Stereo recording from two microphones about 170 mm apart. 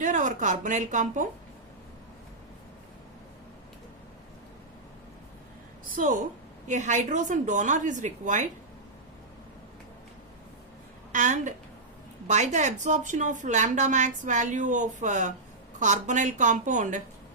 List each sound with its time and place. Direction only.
0.0 s speech: 45° right (ahead or behind)
5.9 s speech: 50° right (ahead or behind)
11.1 s a woman's voice: 45° right (ahead or behind)